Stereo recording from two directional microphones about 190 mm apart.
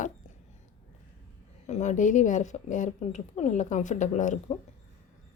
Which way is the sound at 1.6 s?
35° left (ahead or behind).